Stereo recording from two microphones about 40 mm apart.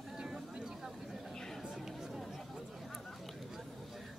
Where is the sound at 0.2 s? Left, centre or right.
Centre.